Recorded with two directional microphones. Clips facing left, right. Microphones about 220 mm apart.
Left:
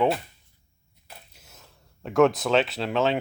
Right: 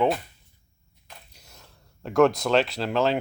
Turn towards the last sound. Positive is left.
turn(degrees=0)  # may be behind; listen again after turning